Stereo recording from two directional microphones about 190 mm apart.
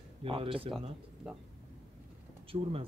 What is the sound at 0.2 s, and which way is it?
Speech, 30° right (ahead or behind).